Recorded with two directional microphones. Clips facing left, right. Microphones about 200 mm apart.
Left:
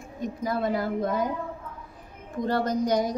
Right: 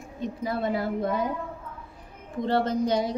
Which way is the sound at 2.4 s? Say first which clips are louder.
Right 1 dB; 25° right (ahead or behind).